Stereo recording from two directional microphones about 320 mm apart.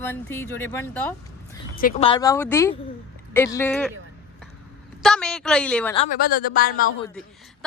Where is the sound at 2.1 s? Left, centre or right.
Centre.